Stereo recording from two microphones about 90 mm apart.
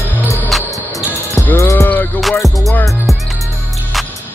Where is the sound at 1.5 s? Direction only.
30° left (ahead or behind).